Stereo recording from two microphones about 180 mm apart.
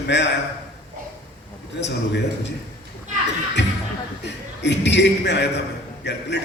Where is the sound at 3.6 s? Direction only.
75° left (ahead or behind).